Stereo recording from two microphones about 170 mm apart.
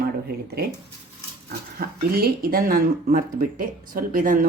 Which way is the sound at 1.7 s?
60° right (ahead or behind).